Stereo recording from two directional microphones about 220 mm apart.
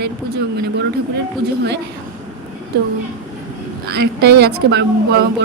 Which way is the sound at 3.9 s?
45° right (ahead or behind).